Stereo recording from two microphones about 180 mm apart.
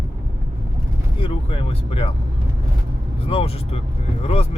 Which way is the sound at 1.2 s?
30° left (ahead or behind).